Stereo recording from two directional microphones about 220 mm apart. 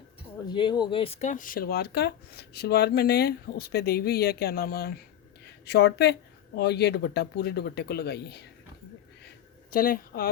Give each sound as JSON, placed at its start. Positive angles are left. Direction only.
{"t": 0.4, "sound": "speech", "side_deg": 20}
{"t": 9.6, "sound": "speech", "side_deg": 40}